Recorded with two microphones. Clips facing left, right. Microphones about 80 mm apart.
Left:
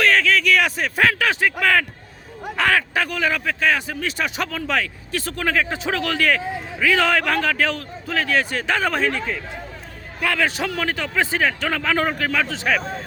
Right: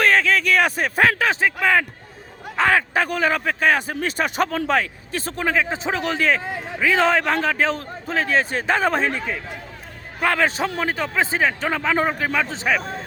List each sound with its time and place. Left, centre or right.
0.0 s speech: right